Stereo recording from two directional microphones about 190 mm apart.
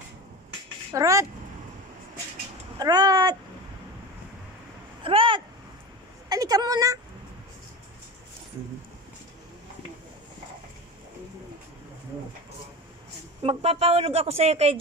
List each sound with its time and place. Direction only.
0.9 s speech: 15° right (ahead or behind)
2.8 s speech: 20° right (ahead or behind)
5.0 s a woman's voice: 30° right (ahead or behind)
13.4 s a woman's voice: 30° right (ahead or behind)